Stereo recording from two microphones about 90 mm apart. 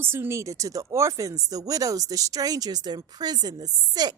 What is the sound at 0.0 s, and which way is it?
A woman's voice, 25° right (ahead or behind).